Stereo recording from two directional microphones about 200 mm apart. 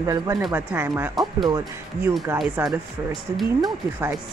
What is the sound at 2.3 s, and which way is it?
A man's voice, 5° right (ahead or behind).